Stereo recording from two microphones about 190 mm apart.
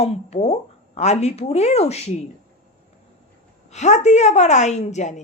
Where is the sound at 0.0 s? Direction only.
35° left (ahead or behind).